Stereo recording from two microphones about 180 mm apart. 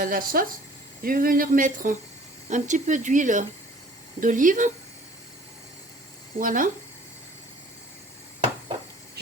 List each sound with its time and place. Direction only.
0.0 s speech: 50° right (ahead or behind)
6.4 s speech: 50° right (ahead or behind)